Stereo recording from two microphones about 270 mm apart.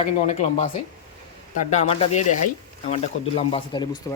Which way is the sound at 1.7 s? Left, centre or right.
Left.